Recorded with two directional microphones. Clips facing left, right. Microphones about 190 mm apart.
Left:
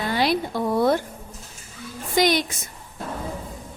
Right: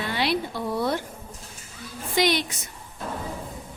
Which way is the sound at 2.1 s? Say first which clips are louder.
Left 3 dB; 45° left (ahead or behind).